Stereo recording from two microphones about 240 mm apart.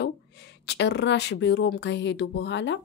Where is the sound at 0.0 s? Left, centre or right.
Left.